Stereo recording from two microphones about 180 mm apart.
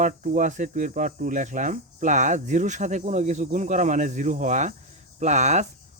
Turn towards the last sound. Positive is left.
turn(degrees=-40)  # may be behind; listen again after turning